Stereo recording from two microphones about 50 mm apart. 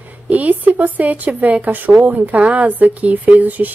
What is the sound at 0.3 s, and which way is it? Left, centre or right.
Speech, right.